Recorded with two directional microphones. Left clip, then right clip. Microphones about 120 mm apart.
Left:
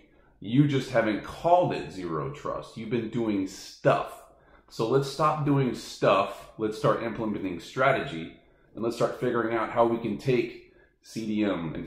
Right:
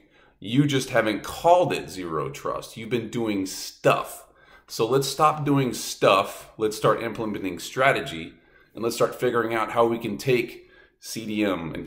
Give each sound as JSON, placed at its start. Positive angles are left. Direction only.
{"t": 0.4, "sound": "speech", "side_deg": -20}